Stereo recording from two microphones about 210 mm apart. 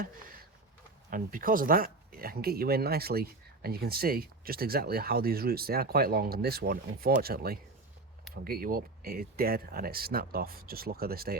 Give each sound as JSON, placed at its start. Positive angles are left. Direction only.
{"t": 1.1, "sound": "speech", "side_deg": -40}